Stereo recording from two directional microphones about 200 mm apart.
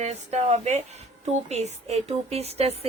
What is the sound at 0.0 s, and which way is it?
Speech, 35° right (ahead or behind).